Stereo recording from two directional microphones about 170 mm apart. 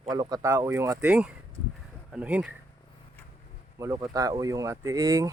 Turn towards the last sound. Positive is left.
turn(degrees=-20)  # may be behind; listen again after turning